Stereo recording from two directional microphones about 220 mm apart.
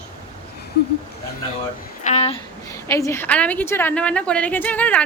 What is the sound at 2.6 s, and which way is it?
A woman's voice, 15° left (ahead or behind).